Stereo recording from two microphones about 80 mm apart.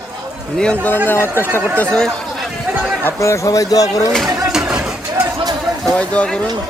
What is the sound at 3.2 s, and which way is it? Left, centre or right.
Speech, left.